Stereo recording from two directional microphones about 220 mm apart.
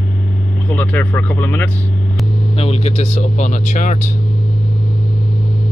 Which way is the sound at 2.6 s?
30° left (ahead or behind).